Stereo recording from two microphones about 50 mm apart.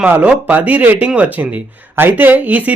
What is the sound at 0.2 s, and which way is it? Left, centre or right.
A man's voice, right.